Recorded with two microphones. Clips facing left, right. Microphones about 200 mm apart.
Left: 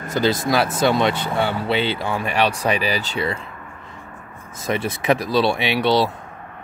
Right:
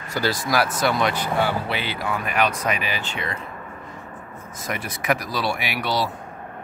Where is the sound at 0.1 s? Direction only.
20° left (ahead or behind).